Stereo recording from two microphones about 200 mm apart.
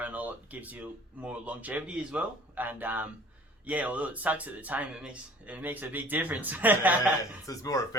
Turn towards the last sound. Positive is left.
turn(degrees=15)  # may be behind; listen again after turning